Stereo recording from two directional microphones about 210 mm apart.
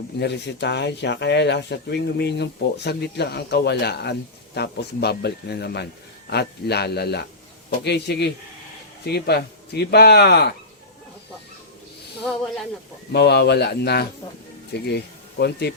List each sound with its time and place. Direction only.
0.2 s speech: 55° left (ahead or behind)
12.2 s speech: centre (ahead or behind)
13.1 s speech: 50° left (ahead or behind)